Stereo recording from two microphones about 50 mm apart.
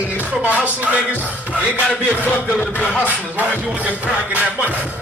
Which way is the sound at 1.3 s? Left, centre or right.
Right.